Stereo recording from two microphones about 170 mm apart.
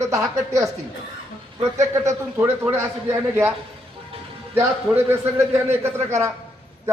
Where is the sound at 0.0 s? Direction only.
20° right (ahead or behind).